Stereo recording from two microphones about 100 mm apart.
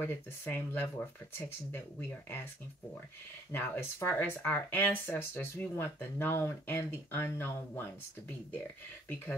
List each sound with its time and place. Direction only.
0.0 s speech: 20° left (ahead or behind)
3.5 s speech: 20° left (ahead or behind)